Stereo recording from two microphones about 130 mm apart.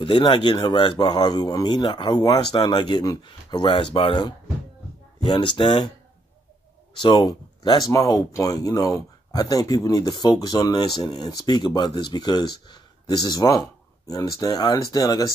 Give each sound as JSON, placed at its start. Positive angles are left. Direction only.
{"t": 0.0, "sound": "speech", "side_deg": 40}
{"t": 7.0, "sound": "speech", "side_deg": 30}